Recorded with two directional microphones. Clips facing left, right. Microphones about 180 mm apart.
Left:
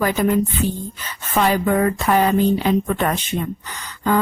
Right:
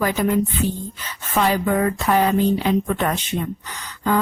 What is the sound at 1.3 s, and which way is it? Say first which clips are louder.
A woman's voice: left 2 dB; 50° left (ahead or behind).